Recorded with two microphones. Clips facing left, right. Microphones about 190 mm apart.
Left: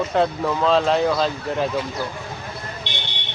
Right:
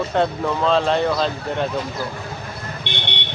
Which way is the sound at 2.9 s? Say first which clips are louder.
Right 4 dB; 60° right (ahead or behind).